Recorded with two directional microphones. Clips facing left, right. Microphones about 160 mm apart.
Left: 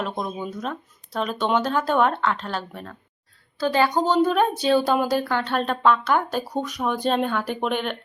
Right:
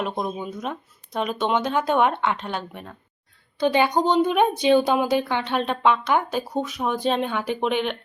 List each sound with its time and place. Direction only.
0.0 s speech: 10° right (ahead or behind)